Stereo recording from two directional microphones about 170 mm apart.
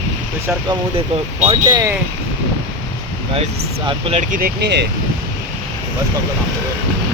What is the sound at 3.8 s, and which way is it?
Speech, 35° right (ahead or behind).